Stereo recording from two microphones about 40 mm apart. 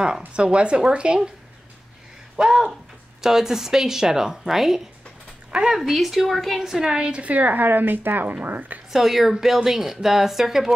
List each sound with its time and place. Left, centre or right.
0.3 s speech: right
2.3 s a sound: right
3.2 s a woman's voice: centre
6.6 s speech: centre
7.2 s speech: right
8.9 s a woman's voice: centre